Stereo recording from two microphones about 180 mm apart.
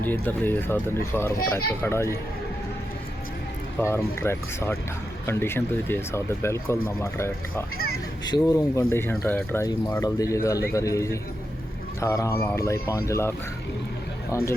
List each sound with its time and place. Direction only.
0.0 s speech: 10° left (ahead or behind)
3.8 s speech: 15° left (ahead or behind)